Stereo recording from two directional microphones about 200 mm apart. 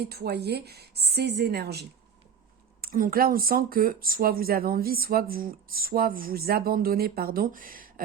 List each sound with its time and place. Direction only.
0.0 s speech: 55° right (ahead or behind)